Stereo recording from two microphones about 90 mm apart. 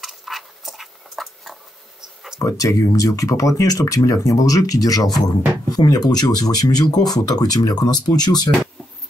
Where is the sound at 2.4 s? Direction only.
40° left (ahead or behind).